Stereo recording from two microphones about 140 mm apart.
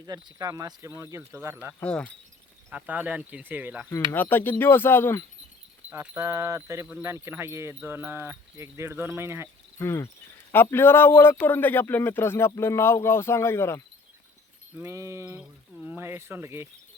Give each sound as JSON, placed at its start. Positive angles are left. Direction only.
{"t": 0.0, "sound": "speech", "side_deg": -30}
{"t": 1.8, "sound": "a man's voice", "side_deg": 5}
{"t": 2.6, "sound": "speech", "side_deg": -10}
{"t": 4.1, "sound": "a man's voice", "side_deg": 15}
{"t": 6.0, "sound": "speech", "side_deg": -20}
{"t": 9.7, "sound": "a man's voice", "side_deg": 20}
{"t": 14.8, "sound": "speech", "side_deg": -20}
{"t": 15.4, "sound": "speech", "side_deg": -5}